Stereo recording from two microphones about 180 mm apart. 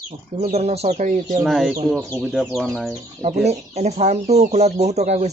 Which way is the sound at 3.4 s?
40° right (ahead or behind).